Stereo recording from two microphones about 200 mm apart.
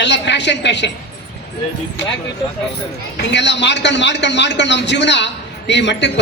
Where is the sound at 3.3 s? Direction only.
60° left (ahead or behind).